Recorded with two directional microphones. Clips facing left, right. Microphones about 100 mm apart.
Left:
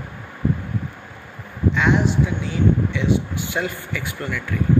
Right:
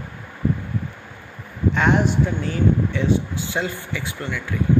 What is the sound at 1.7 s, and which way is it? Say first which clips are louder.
Speech: even; 45° right (ahead or behind).